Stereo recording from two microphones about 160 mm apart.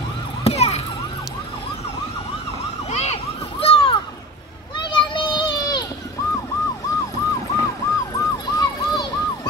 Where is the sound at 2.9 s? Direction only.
40° left (ahead or behind).